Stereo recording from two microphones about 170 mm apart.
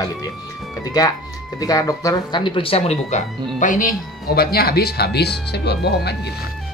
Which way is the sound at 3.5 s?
50° left (ahead or behind).